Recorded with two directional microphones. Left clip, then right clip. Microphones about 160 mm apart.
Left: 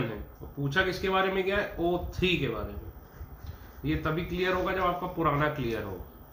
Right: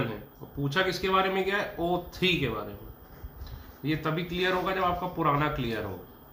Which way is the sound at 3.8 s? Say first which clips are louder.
Right 1 dB; 30° right (ahead or behind).